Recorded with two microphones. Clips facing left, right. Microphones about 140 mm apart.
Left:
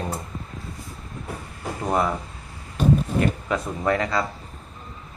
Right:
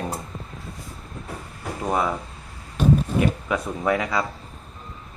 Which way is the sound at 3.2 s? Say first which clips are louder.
Right 1 dB; 5° right (ahead or behind).